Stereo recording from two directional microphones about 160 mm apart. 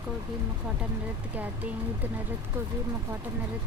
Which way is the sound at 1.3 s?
10° right (ahead or behind).